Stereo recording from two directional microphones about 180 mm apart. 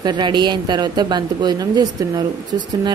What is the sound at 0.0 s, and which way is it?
A woman's voice, 25° right (ahead or behind).